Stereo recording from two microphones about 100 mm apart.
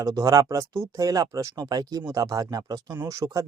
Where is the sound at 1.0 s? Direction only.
35° right (ahead or behind).